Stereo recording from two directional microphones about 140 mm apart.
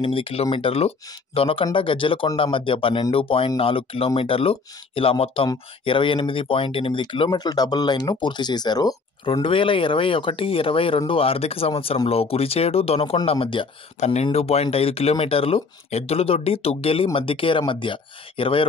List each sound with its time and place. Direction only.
0.0 s speech: 40° left (ahead or behind)
9.2 s speech: 40° left (ahead or behind)
13.9 s speech: 50° left (ahead or behind)